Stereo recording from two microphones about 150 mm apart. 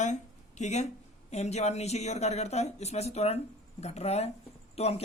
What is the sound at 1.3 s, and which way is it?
Speech, 45° left (ahead or behind).